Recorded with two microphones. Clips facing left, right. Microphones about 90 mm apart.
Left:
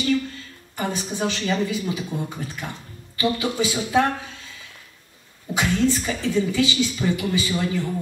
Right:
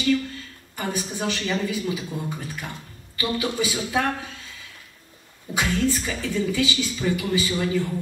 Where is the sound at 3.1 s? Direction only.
25° left (ahead or behind).